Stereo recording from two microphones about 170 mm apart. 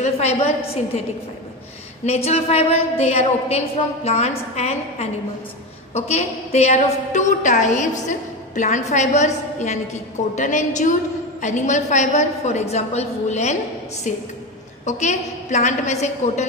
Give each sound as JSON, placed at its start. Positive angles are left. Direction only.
{"t": 0.0, "sound": "a woman's voice", "side_deg": 40}
{"t": 2.0, "sound": "a woman's voice", "side_deg": 35}